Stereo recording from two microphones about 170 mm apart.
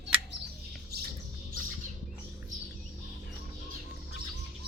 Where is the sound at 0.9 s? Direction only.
70° right (ahead or behind).